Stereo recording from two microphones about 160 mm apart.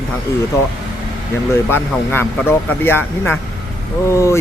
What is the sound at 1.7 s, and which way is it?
Speech, 15° left (ahead or behind).